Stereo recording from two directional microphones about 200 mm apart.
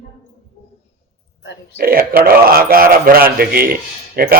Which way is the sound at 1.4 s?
60° left (ahead or behind).